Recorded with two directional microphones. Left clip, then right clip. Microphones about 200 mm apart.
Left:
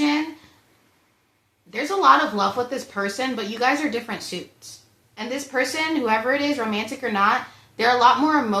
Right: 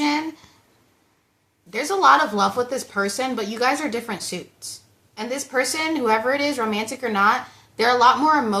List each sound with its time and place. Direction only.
1.7 s speech: 15° right (ahead or behind)